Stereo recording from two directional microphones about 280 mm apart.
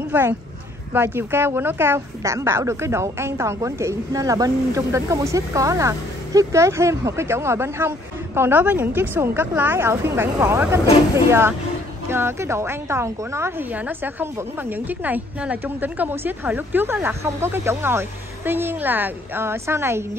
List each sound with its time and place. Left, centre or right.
0.1 s a woman's voice: centre